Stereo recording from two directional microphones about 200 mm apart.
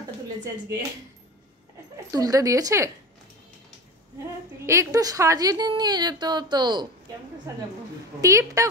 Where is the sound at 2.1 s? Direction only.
15° right (ahead or behind).